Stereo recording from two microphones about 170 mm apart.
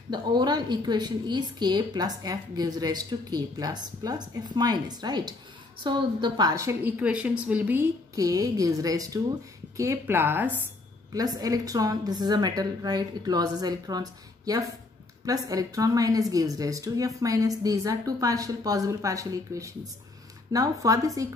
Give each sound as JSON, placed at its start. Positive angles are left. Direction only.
{"t": 0.1, "sound": "a woman's voice", "side_deg": -25}
{"t": 8.2, "sound": "a woman's voice", "side_deg": -20}